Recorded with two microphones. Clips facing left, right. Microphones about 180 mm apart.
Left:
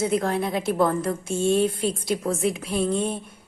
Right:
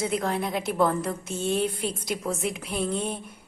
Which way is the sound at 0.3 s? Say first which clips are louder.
Left 3 dB; 25° left (ahead or behind).